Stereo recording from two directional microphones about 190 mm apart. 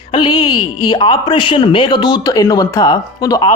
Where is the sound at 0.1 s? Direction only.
25° left (ahead or behind).